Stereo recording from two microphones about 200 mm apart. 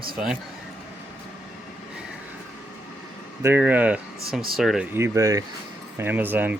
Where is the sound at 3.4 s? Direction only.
10° right (ahead or behind).